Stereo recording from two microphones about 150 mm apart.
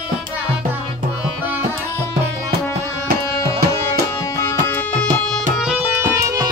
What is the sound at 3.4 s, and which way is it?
Music, 20° left (ahead or behind).